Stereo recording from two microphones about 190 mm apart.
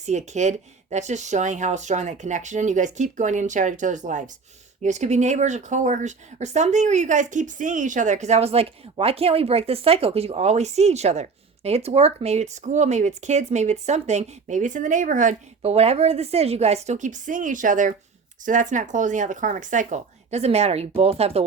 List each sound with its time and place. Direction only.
0.0 s speech: 35° right (ahead or behind)